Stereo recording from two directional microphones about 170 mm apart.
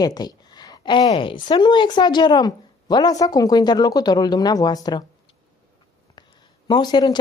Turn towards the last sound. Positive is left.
turn(degrees=25)  # may be behind; listen again after turning